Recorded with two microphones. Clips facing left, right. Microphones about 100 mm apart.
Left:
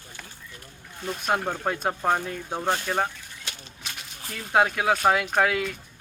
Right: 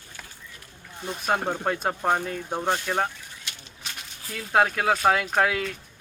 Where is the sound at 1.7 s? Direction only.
Centre (ahead or behind).